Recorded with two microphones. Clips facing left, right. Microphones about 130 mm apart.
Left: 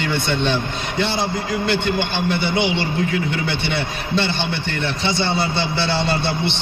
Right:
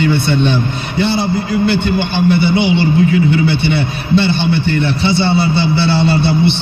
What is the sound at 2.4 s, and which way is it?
A man's voice, 10° right (ahead or behind).